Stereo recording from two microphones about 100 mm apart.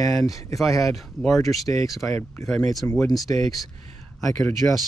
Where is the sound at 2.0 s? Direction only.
20° left (ahead or behind).